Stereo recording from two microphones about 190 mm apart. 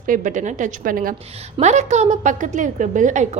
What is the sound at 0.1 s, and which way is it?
A woman's voice, 40° right (ahead or behind).